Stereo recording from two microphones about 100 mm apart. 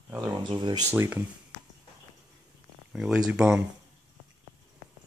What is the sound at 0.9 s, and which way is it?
Speech, 20° right (ahead or behind).